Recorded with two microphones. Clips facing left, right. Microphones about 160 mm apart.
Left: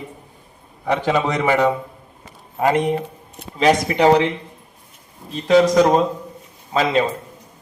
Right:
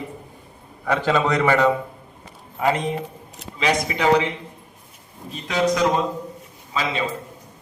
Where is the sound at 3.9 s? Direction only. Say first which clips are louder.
Left 3 dB; 35° left (ahead or behind).